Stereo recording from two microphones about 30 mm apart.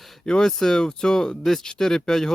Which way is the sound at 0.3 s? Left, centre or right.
Left.